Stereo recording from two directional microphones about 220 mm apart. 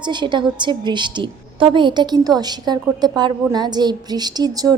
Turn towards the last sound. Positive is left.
turn(degrees=-15)  # may be behind; listen again after turning